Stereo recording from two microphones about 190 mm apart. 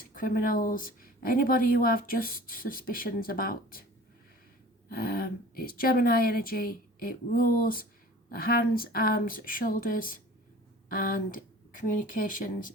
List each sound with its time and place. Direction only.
0.2 s speech: 45° left (ahead or behind)
4.9 s speech: 50° left (ahead or behind)